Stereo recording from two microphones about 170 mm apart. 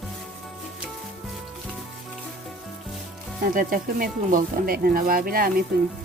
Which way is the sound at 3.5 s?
55° right (ahead or behind).